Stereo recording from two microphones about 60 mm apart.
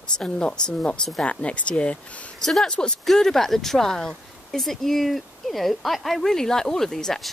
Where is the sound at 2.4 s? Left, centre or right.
Centre.